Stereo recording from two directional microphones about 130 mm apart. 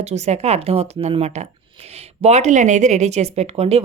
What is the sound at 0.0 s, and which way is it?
A woman's voice, 60° right (ahead or behind).